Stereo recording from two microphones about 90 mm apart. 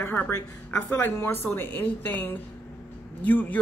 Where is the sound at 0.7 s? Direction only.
25° left (ahead or behind).